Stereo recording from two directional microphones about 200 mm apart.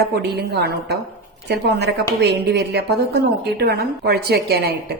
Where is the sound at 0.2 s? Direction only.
55° right (ahead or behind).